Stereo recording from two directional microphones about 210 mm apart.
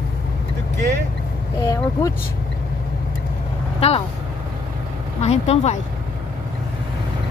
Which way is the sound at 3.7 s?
30° left (ahead or behind).